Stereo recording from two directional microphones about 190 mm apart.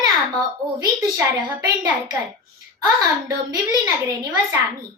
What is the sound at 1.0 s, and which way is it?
Speech, 20° right (ahead or behind).